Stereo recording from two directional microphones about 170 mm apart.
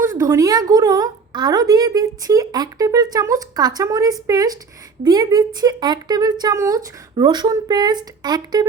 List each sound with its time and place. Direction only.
0.0 s a woman's voice: 15° right (ahead or behind)